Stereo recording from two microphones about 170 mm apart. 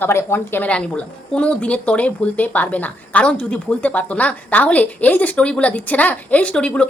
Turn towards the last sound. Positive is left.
turn(degrees=5)  # may be behind; listen again after turning